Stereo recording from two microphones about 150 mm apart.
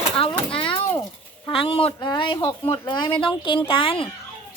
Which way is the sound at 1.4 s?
40° left (ahead or behind).